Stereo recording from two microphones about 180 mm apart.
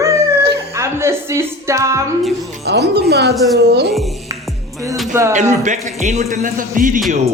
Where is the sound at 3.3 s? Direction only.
Centre (ahead or behind).